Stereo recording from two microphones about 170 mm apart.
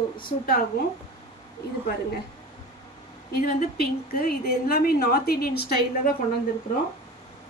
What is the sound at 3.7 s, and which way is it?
A woman's voice, 65° left (ahead or behind).